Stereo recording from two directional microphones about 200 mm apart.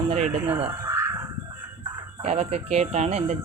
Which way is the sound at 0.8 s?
15° right (ahead or behind).